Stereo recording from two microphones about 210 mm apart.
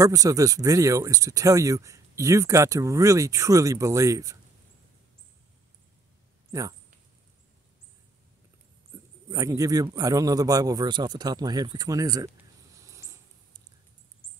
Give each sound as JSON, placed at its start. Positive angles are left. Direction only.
{"t": 0.0, "sound": "speech", "side_deg": -15}
{"t": 9.3, "sound": "speech", "side_deg": -15}